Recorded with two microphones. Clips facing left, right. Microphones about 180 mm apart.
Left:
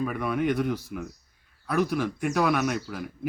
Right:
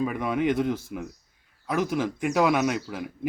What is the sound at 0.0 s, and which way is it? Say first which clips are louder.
Speech: right 1 dB; 20° right (ahead or behind).